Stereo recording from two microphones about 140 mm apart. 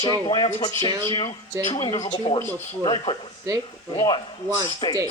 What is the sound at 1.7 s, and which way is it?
Speech, 30° left (ahead or behind).